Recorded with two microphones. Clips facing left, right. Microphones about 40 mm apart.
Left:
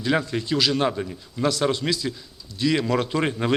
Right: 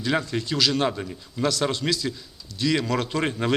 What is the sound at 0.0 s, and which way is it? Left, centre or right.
Speech, centre.